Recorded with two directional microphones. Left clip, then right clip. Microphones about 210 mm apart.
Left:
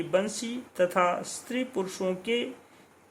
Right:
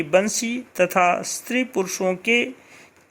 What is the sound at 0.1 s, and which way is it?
Speech, 25° right (ahead or behind).